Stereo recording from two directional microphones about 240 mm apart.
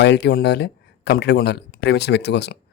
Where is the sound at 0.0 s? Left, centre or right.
Left.